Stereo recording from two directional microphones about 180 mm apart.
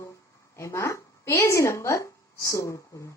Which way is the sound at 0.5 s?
15° left (ahead or behind).